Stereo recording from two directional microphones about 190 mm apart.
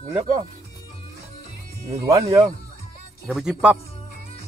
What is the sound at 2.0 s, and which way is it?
Speech, 20° right (ahead or behind).